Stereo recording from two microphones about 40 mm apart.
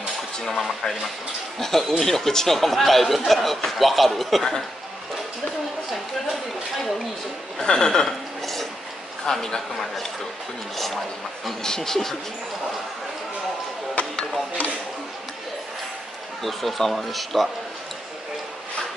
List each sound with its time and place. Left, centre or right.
0.5 s speech: centre
5.9 s speech: centre
7.6 s a woman's voice: centre
9.2 s a woman's voice: centre
11.6 s a woman's voice: centre
14.0 s a sound: left
16.4 s speech: centre